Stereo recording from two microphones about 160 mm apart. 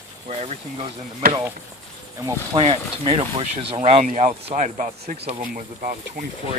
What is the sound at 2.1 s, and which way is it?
Speech, 20° right (ahead or behind).